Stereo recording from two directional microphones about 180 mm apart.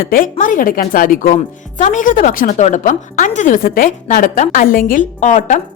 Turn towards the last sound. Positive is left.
turn(degrees=40)  # may be behind; listen again after turning